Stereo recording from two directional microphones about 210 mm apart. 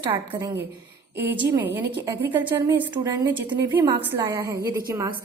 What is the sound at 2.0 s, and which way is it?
A woman's voice, 10° right (ahead or behind).